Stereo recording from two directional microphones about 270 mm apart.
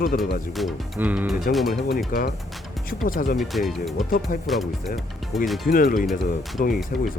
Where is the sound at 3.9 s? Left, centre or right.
Left.